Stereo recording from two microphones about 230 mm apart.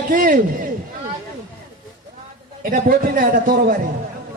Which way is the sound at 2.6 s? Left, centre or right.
Right.